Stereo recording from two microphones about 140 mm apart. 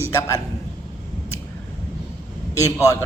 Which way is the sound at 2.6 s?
20° left (ahead or behind).